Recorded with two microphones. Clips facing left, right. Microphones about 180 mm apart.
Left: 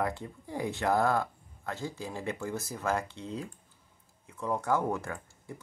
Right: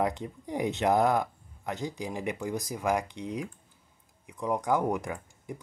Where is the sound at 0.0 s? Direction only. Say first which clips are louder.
Right 3 dB; 20° right (ahead or behind).